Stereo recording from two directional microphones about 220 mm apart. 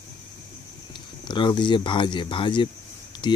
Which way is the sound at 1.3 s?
20° left (ahead or behind).